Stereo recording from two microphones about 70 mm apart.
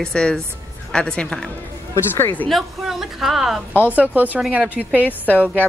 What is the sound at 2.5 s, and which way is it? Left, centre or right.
Speech, centre.